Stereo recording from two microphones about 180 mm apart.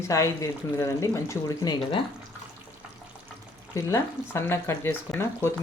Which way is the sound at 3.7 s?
15° left (ahead or behind).